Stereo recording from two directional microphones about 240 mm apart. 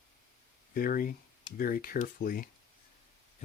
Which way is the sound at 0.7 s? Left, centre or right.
Left.